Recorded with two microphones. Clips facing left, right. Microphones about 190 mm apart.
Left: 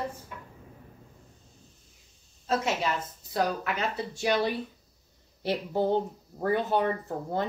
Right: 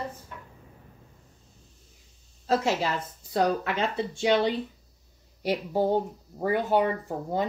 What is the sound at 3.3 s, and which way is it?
Speech, 25° right (ahead or behind).